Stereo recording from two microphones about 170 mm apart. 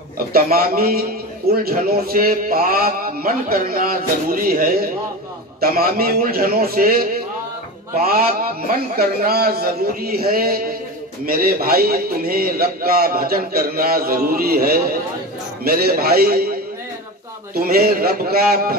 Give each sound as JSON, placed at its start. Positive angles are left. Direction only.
{"t": 0.3, "sound": "a man's voice", "side_deg": -60}
{"t": 17.6, "sound": "a man's voice", "side_deg": -60}